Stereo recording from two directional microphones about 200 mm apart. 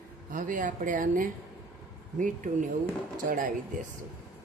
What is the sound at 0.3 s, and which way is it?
Speech, 40° right (ahead or behind).